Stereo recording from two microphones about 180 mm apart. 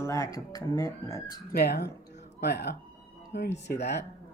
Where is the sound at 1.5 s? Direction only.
60° left (ahead or behind).